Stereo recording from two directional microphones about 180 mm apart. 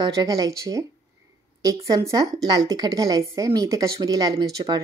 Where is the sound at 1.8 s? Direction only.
20° right (ahead or behind).